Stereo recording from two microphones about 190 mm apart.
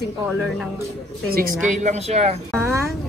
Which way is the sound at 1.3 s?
45° right (ahead or behind).